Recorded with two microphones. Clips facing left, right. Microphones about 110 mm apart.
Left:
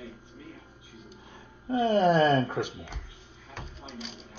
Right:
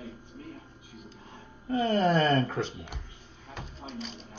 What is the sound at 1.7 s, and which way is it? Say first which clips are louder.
Speech: left 2 dB; 20° left (ahead or behind).